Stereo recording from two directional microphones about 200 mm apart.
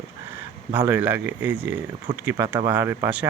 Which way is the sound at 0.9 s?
10° right (ahead or behind).